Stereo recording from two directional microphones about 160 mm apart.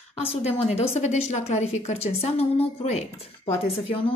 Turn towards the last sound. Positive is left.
turn(degrees=35)  # may be behind; listen again after turning